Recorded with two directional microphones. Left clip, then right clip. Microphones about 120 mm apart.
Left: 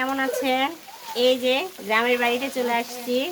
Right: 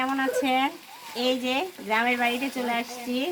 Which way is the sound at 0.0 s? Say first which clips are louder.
Left 1 dB; 50° left (ahead or behind).